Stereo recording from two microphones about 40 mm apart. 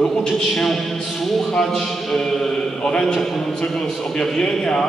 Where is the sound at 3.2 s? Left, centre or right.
Centre.